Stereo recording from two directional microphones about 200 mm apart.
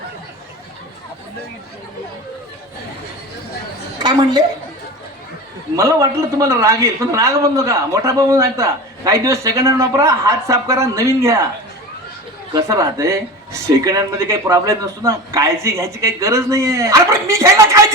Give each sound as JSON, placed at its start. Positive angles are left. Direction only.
{"t": 3.9, "sound": "a woman's voice", "side_deg": -20}
{"t": 5.7, "sound": "a man's voice", "side_deg": -15}
{"t": 12.5, "sound": "a man's voice", "side_deg": -15}